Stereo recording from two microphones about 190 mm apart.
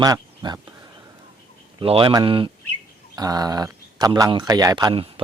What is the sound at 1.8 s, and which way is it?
Speech, 30° right (ahead or behind).